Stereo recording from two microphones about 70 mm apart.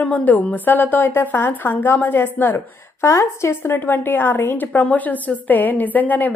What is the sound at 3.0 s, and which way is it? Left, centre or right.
A woman's voice, left.